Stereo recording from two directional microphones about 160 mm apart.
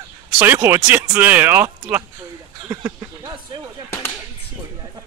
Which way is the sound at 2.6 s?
20° right (ahead or behind).